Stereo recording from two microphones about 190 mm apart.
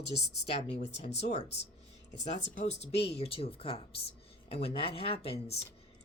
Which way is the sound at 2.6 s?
35° left (ahead or behind).